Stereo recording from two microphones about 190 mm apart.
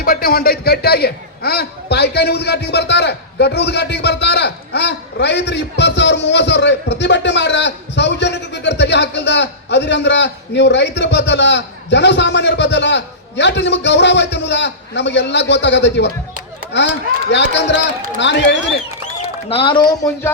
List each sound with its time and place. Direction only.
0.0 s a man's voice: 50° left (ahead or behind); by 18.8 s 70° left (ahead or behind)
19.5 s speech: 30° left (ahead or behind)